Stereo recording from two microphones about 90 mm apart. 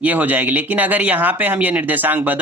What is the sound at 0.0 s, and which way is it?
A man's voice, 20° right (ahead or behind).